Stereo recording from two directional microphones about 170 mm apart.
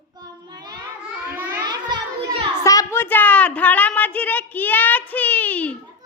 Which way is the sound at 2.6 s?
15° left (ahead or behind).